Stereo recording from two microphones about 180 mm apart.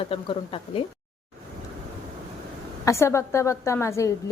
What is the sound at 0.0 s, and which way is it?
Speech, 30° left (ahead or behind).